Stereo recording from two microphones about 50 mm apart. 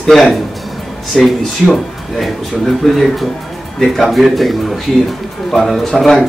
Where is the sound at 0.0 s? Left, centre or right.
Centre.